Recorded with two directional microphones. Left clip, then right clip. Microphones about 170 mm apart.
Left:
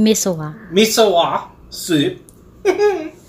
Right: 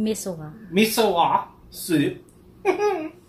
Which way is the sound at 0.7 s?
5° right (ahead or behind).